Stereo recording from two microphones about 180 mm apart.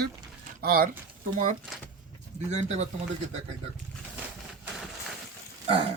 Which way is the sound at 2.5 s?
40° right (ahead or behind).